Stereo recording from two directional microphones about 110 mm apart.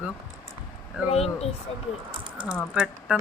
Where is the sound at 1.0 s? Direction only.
70° left (ahead or behind).